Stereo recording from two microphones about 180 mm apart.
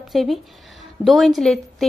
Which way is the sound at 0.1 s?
Centre (ahead or behind).